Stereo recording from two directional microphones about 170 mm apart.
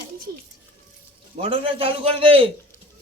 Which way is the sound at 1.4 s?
30° right (ahead or behind).